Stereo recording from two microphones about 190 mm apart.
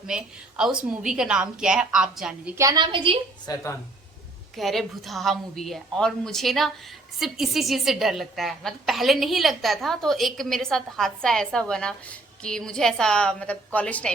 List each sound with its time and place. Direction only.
0.1 s a woman's voice: 5° right (ahead or behind); by 3.2 s 25° right (ahead or behind)
3.4 s speech: 15° left (ahead or behind)
4.5 s a woman's voice: centre (ahead or behind)